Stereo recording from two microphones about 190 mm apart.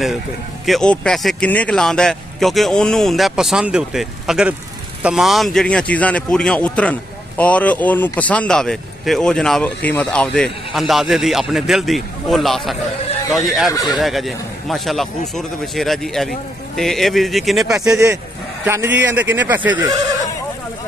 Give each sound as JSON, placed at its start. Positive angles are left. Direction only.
{"t": 0.7, "sound": "speech", "side_deg": 5}
{"t": 17.7, "sound": "speech", "side_deg": -15}